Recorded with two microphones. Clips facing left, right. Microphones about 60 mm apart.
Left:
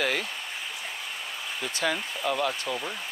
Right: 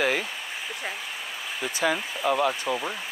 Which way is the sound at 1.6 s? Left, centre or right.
Centre.